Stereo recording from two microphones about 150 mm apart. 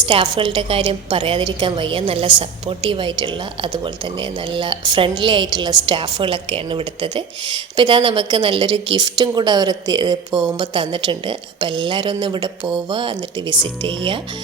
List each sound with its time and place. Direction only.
0.0 s a woman's voice: 35° right (ahead or behind)